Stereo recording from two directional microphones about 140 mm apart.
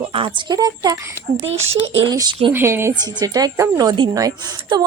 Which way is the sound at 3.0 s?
30° right (ahead or behind).